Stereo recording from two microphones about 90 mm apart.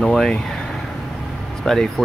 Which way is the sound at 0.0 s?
5° left (ahead or behind).